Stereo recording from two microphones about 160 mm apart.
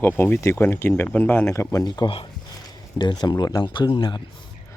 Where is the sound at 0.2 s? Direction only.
15° left (ahead or behind); by 4.2 s 30° left (ahead or behind).